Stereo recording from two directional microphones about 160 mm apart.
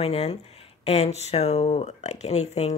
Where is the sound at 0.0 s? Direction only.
40° left (ahead or behind).